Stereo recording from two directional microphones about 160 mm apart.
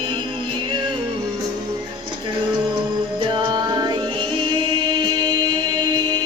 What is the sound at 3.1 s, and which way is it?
Music, 30° right (ahead or behind).